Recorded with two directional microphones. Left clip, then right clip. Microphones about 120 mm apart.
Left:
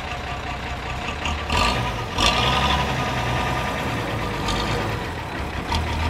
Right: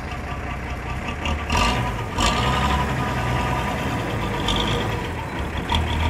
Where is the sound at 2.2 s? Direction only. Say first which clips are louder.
Left 2 dB; 35° left (ahead or behind).